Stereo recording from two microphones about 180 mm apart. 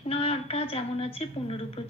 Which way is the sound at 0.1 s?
35° left (ahead or behind).